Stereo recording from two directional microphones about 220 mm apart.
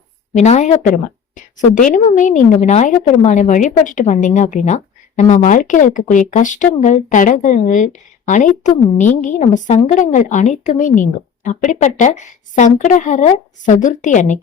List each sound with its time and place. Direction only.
0.3 s a woman's voice: 30° left (ahead or behind)